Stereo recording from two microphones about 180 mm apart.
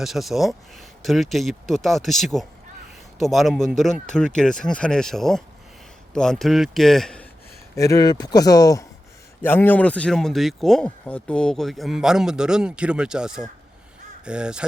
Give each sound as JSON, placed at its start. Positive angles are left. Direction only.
{"t": 0.0, "sound": "speech", "side_deg": 0}
{"t": 7.8, "sound": "speech", "side_deg": 20}